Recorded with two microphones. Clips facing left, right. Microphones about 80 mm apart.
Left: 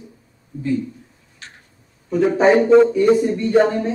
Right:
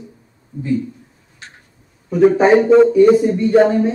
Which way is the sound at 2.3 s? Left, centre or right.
Centre.